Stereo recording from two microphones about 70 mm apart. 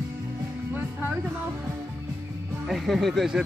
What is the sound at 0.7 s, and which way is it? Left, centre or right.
Music, right.